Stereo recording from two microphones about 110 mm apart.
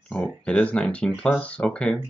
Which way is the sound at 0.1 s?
10° left (ahead or behind).